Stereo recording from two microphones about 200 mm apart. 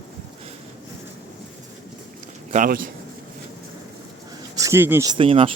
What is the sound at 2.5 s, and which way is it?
Speech, 40° right (ahead or behind).